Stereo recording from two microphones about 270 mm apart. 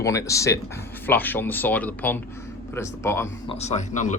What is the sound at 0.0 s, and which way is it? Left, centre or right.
Speech, centre.